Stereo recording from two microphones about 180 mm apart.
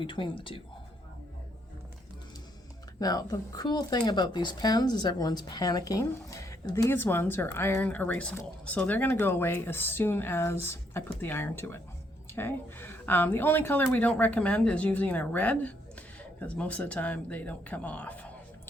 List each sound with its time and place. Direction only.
0.0 s speech: 30° left (ahead or behind)
3.0 s speech: 20° left (ahead or behind)